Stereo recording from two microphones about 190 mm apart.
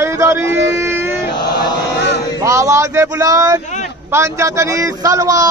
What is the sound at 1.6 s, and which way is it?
Chant, 65° left (ahead or behind).